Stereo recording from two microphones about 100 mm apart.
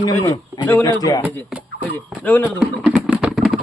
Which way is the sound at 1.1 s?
35° left (ahead or behind).